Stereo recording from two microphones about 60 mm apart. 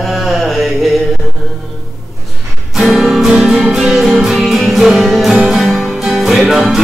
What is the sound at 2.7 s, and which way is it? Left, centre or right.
Music, centre.